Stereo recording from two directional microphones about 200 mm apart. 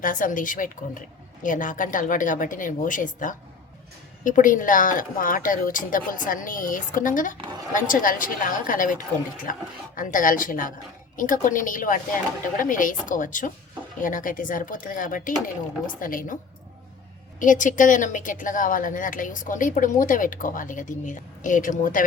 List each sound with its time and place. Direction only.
0.0 s a woman's voice: 40° left (ahead or behind)
17.4 s a woman's voice: 40° left (ahead or behind)